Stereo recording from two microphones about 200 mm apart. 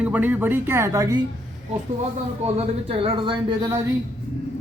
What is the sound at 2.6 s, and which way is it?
Speech, 25° right (ahead or behind).